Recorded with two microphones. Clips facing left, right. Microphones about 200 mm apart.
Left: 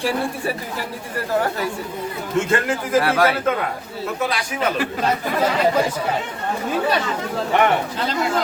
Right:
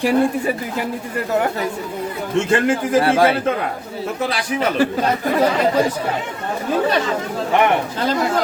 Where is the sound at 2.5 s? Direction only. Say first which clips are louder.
Right 4 dB; 25° right (ahead or behind).